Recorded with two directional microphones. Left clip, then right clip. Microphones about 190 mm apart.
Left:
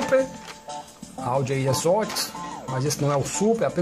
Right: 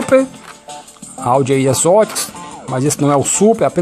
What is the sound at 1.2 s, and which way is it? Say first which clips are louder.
Speech: right 12 dB; 35° right (ahead or behind).